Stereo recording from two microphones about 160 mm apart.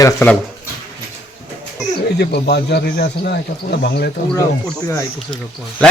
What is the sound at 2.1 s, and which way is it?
Speech, 90° left.